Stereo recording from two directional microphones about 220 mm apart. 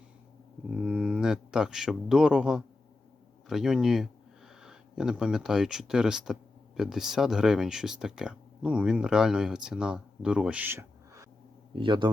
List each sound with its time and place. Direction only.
0.7 s a man's voice: 5° right (ahead or behind); by 12.0 s 20° right (ahead or behind)